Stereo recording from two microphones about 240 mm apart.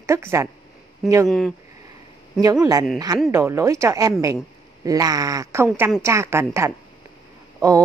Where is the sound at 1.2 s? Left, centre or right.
Centre.